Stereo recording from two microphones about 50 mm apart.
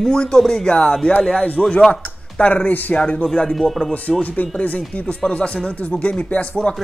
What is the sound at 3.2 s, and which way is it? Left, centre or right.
Speech, centre.